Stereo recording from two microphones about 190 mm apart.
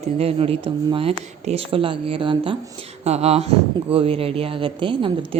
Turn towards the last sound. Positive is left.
turn(degrees=-25)  # may be behind; listen again after turning